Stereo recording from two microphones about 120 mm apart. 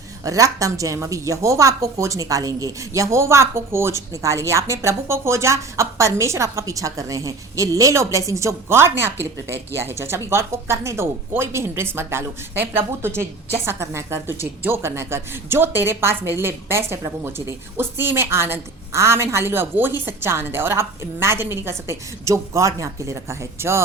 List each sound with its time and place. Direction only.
0.3 s a woman's voice: 30° right (ahead or behind)